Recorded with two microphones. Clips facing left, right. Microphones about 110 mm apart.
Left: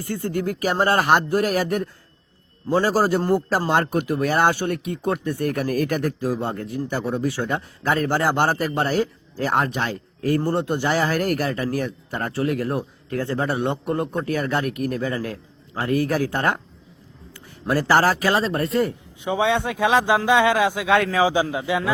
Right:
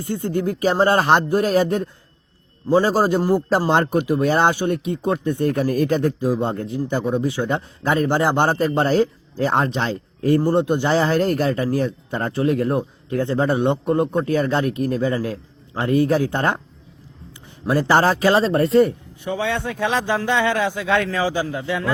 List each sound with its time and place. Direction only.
0.0 s a man's voice: 20° right (ahead or behind)
17.7 s speech: 20° right (ahead or behind)
19.2 s speech: 15° left (ahead or behind)